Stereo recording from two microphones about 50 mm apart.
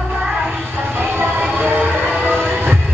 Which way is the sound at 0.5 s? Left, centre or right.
Right.